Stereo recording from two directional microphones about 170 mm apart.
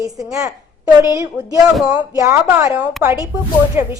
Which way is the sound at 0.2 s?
20° right (ahead or behind).